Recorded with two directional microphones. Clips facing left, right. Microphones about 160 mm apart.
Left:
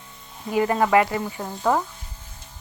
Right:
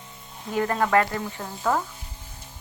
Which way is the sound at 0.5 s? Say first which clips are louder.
Left 3 dB; 10° left (ahead or behind).